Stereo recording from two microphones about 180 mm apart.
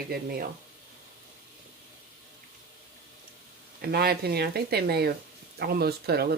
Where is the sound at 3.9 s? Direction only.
60° right (ahead or behind).